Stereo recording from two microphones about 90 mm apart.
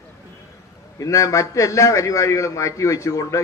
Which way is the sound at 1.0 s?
35° left (ahead or behind).